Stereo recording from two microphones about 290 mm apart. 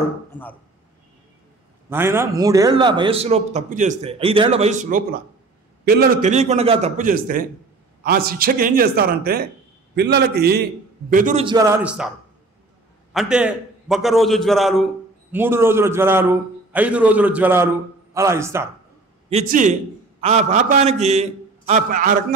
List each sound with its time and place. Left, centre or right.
0.3 s a man's voice: centre
1.9 s a man's voice: centre
13.1 s a man's voice: centre
19.2 s a man's voice: right